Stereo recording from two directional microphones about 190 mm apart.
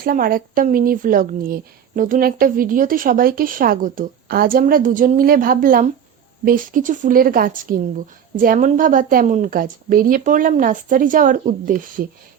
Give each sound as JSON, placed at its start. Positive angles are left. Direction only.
{"t": 0.0, "sound": "a woman's voice", "side_deg": -50}